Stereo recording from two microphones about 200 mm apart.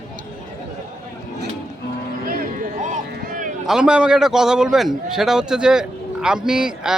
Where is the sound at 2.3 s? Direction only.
40° right (ahead or behind).